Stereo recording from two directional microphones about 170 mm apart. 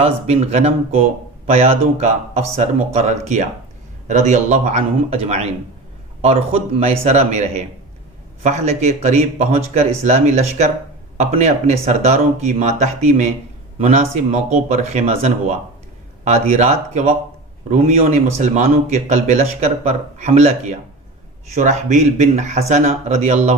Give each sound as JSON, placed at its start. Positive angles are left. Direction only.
{"t": 0.0, "sound": "a man's voice", "side_deg": -40}